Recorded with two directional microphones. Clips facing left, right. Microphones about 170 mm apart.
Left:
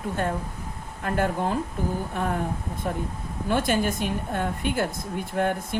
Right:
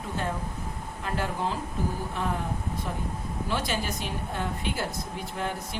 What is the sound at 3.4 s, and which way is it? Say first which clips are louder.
A woman's voice: left 7 dB; 50° left (ahead or behind).